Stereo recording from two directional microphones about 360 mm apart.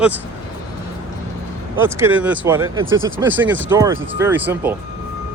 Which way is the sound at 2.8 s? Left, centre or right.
Right.